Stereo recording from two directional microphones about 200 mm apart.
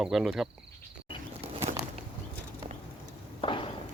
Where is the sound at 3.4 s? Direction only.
25° left (ahead or behind).